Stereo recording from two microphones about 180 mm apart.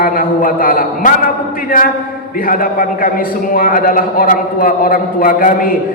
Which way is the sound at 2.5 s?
55° left (ahead or behind).